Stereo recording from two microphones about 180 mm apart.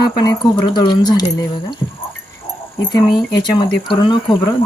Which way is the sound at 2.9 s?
25° left (ahead or behind).